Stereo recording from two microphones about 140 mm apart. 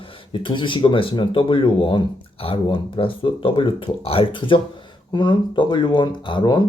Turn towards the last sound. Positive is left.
turn(degrees=35)  # may be behind; listen again after turning